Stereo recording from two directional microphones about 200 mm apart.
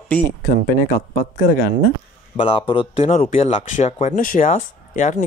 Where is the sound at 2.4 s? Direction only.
25° left (ahead or behind).